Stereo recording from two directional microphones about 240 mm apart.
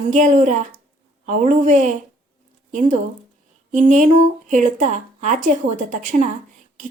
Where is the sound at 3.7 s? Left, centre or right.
Right.